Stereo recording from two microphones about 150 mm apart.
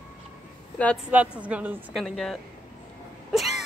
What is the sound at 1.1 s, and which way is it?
Speech, 10° right (ahead or behind).